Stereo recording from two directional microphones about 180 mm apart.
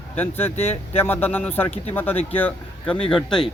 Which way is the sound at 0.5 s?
35° left (ahead or behind).